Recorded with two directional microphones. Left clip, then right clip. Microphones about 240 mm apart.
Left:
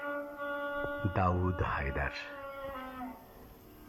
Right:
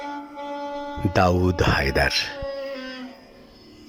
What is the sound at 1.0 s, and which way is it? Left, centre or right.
Speech, right.